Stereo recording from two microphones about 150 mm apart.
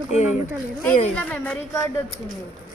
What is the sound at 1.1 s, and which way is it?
Speech, 5° left (ahead or behind).